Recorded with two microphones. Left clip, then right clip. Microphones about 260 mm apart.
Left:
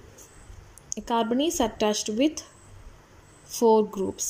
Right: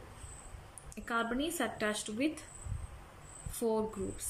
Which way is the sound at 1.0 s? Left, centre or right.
Centre.